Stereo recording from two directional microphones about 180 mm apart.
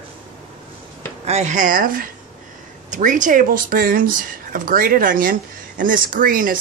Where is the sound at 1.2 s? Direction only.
40° right (ahead or behind).